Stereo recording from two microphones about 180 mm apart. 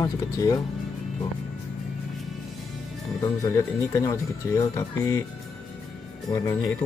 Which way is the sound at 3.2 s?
15° left (ahead or behind).